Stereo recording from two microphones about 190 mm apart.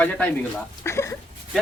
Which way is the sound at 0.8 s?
15° left (ahead or behind).